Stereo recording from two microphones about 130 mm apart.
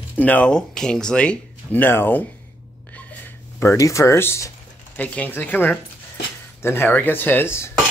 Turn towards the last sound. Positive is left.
turn(degrees=20)  # may be behind; listen again after turning